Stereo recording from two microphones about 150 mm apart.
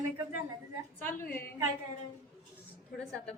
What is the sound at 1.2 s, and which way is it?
Speech, 15° left (ahead or behind).